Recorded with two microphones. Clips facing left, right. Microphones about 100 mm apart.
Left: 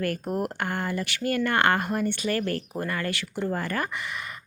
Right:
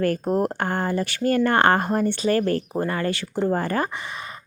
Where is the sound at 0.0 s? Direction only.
35° right (ahead or behind).